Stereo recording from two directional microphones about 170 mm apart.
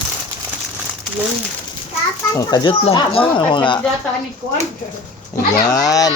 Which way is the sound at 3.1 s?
35° left (ahead or behind).